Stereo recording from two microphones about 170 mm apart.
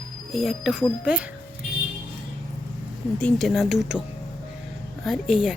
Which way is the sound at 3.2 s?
5° left (ahead or behind).